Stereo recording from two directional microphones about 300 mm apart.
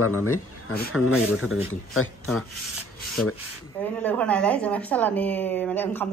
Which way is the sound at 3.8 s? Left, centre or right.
Centre.